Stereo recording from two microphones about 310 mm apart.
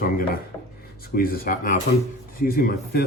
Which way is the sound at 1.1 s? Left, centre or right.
Left.